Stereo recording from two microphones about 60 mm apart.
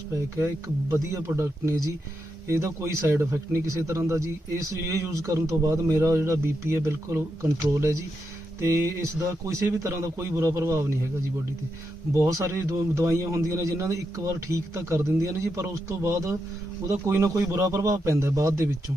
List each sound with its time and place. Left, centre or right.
0.3 s a man's voice: right
2.5 s a man's voice: right
12.5 s a man's voice: right